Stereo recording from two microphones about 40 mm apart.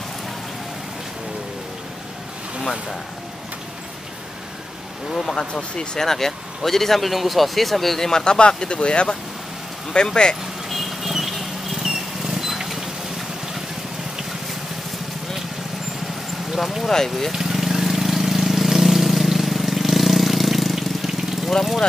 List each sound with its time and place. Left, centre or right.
5.1 s speech: centre
5.5 s speech: left
5.9 s speech: centre
8.1 s speech: left
10.7 s vehicle: centre
16.8 s speech: centre
17.3 s vehicle: centre